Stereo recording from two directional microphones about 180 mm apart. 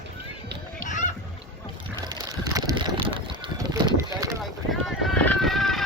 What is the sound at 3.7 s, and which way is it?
Run, 20° right (ahead or behind).